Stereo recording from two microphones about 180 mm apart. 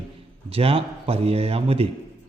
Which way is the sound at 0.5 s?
30° right (ahead or behind).